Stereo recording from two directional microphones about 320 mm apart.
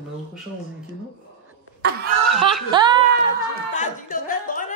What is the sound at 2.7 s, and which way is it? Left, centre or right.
Speech, centre.